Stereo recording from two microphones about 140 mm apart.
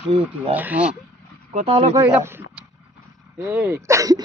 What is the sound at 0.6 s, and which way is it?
Speech, 10° right (ahead or behind).